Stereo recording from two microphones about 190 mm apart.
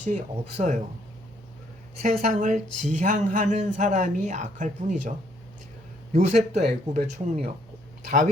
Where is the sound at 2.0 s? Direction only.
40° right (ahead or behind).